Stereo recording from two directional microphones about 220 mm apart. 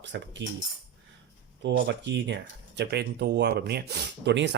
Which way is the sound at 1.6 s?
55° right (ahead or behind).